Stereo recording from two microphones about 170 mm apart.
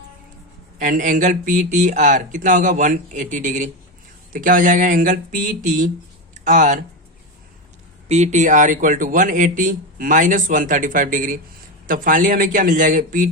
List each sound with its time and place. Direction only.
0.8 s speech: 50° right (ahead or behind)
8.0 s speech: 40° right (ahead or behind)